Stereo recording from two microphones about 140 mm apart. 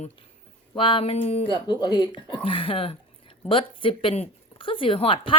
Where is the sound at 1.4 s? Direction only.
35° left (ahead or behind).